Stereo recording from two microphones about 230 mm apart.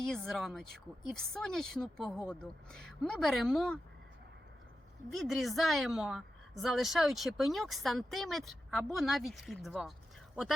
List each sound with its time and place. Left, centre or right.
0.0 s a woman's voice: centre
5.1 s a woman's voice: centre